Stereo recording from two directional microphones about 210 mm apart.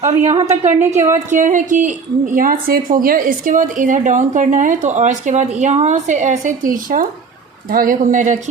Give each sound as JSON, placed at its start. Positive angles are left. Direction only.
{"t": 0.0, "sound": "a woman's voice", "side_deg": -35}
{"t": 0.9, "sound": "a woman's voice", "side_deg": -10}
{"t": 1.3, "sound": "a woman's voice", "side_deg": -35}